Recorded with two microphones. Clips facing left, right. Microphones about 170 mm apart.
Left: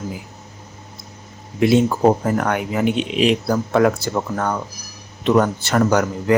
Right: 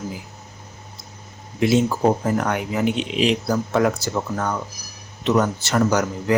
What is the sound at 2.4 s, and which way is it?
Speech, 55° left (ahead or behind).